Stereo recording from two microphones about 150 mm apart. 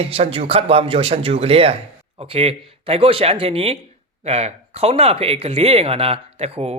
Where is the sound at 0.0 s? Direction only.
40° right (ahead or behind).